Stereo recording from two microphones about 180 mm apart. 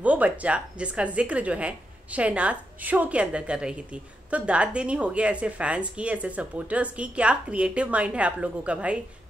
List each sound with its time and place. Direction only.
0.0 s a woman's voice: 10° right (ahead or behind)